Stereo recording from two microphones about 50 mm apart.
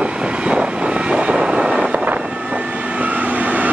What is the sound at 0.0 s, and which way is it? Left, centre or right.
Vehicle, right.